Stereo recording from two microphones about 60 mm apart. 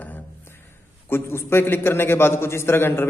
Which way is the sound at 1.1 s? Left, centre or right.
Left.